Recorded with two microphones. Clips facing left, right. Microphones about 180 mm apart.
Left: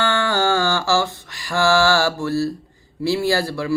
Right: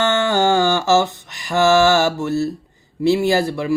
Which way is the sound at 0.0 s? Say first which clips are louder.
Right 3 dB; 20° right (ahead or behind).